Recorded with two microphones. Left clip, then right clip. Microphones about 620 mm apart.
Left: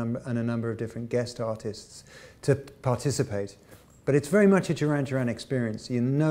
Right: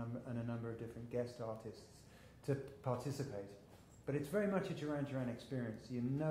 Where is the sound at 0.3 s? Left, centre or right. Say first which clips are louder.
Left 15 dB; left.